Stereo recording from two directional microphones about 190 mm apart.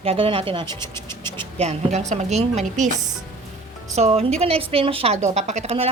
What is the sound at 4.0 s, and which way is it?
A woman's voice, 35° right (ahead or behind).